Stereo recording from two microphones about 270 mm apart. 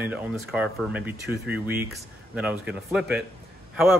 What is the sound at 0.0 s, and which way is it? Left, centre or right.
Speech, centre.